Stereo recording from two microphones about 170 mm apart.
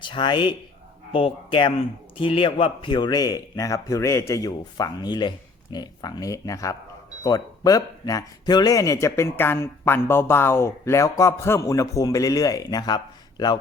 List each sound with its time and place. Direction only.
0.0 s speech: 25° left (ahead or behind)